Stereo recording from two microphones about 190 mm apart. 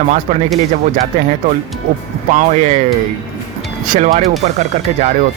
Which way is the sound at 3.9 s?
45° right (ahead or behind).